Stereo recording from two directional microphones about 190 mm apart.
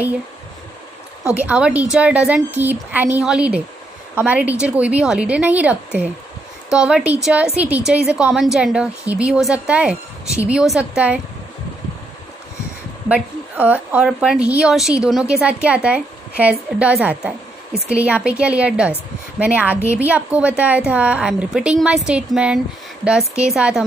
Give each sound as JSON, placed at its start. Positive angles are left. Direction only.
{"t": 1.2, "sound": "a woman's voice", "side_deg": -5}
{"t": 13.1, "sound": "a woman's voice", "side_deg": -10}